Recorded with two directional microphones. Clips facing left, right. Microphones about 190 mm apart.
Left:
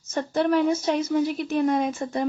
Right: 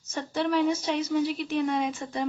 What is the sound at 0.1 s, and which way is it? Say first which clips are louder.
A woman's voice: left 5 dB; 50° left (ahead or behind).